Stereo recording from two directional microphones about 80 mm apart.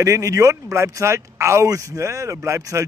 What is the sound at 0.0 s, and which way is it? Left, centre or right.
Speech, right.